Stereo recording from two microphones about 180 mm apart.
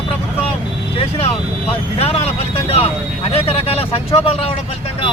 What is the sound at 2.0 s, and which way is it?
Speech, 35° left (ahead or behind).